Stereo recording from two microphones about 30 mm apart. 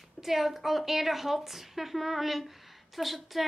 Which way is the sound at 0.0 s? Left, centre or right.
Centre.